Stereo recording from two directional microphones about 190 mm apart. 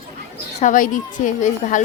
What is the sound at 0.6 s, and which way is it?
A woman's voice, 45° left (ahead or behind).